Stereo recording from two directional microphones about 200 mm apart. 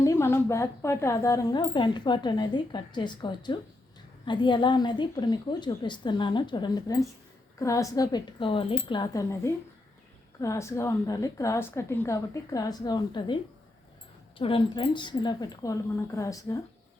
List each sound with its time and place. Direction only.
0.0 s a woman's voice: 15° left (ahead or behind)